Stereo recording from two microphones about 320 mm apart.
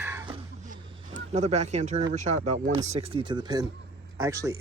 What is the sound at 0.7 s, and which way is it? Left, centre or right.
Speech, right.